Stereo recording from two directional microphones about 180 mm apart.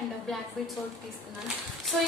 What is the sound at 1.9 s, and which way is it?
Speech, centre (ahead or behind).